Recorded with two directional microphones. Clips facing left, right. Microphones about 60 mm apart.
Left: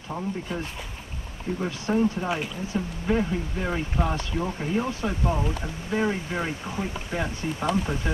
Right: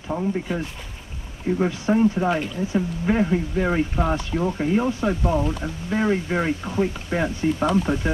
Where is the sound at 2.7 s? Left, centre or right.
Right.